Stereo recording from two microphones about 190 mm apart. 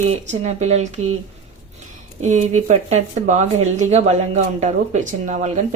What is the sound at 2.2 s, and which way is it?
Speech, 35° right (ahead or behind).